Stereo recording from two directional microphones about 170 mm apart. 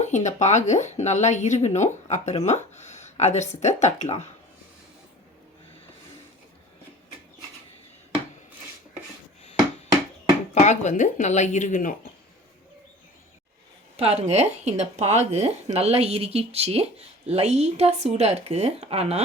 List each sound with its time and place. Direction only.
0.0 s speech: 45° left (ahead or behind)
10.5 s speech: 45° left (ahead or behind)
13.9 s speech: 35° right (ahead or behind)